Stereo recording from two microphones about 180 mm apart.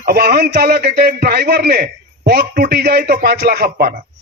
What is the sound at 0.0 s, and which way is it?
A man's voice, 60° right (ahead or behind).